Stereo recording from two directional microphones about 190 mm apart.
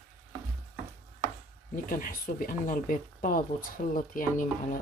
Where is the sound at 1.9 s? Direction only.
45° left (ahead or behind).